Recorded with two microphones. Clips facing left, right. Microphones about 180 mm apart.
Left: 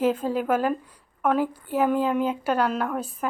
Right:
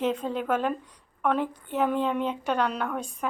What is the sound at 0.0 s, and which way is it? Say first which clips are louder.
A woman's voice: left 4 dB; 5° left (ahead or behind).